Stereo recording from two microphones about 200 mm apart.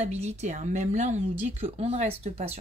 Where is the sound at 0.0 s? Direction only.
35° right (ahead or behind).